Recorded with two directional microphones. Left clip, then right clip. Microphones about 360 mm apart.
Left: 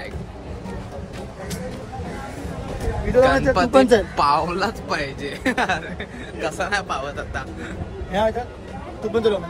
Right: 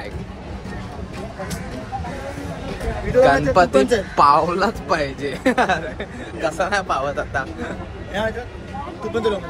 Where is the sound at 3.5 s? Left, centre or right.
Centre.